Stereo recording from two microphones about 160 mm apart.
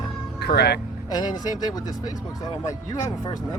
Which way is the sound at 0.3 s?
90° left.